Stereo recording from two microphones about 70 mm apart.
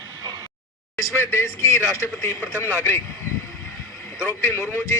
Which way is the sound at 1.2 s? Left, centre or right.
Left.